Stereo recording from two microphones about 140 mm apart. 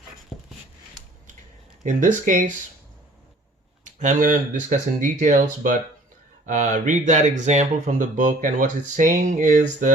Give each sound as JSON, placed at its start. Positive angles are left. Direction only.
{"t": 1.8, "sound": "speech", "side_deg": -60}
{"t": 3.8, "sound": "speech", "side_deg": -65}